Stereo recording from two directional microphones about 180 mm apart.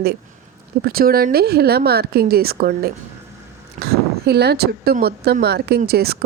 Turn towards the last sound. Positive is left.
turn(degrees=-60)  # may be behind; listen again after turning